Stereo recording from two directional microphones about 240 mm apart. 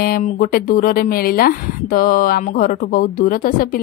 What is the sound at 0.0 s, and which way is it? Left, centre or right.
Speech, left.